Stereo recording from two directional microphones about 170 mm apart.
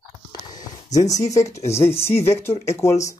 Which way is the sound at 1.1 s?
20° left (ahead or behind).